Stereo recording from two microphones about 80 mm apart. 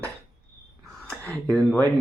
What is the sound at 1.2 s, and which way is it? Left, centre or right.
Speech, centre.